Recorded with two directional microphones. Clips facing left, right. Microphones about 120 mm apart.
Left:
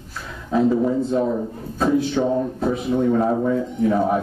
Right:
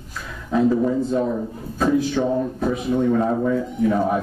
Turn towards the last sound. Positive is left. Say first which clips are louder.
# left 1 dB
turn(degrees=15)  # may be behind; listen again after turning